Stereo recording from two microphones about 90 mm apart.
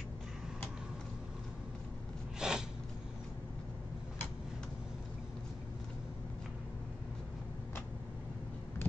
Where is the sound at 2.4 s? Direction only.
5° right (ahead or behind).